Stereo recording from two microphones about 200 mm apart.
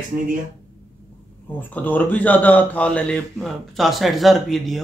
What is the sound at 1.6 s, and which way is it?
Speech, 10° left (ahead or behind).